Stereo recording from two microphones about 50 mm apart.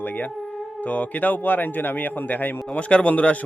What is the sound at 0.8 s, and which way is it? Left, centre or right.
A man's voice, left.